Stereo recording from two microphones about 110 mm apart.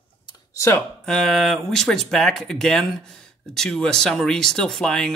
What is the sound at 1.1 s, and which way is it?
Speech, 5° left (ahead or behind).